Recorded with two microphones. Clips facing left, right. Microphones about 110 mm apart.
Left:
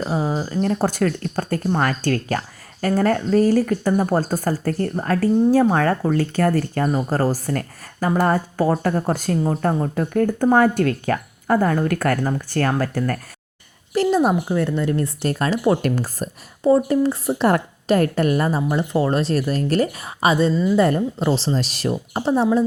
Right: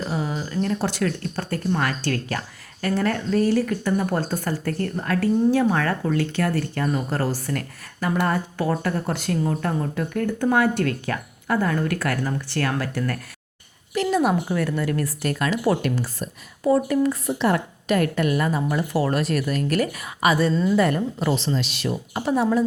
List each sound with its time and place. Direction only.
0.0 s speech: 35° left (ahead or behind)
15.8 s speech: 45° left (ahead or behind)
16.6 s speech: 30° left (ahead or behind)
17.3 s speech: 45° left (ahead or behind); by 20.5 s 25° left (ahead or behind)
20.5 s a woman's voice: 5° left (ahead or behind)
20.7 s speech: 30° left (ahead or behind)